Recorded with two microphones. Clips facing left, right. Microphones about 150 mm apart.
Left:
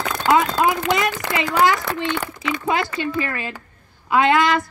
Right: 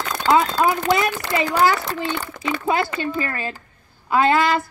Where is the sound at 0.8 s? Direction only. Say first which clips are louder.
Right 1 dB; 35° right (ahead or behind).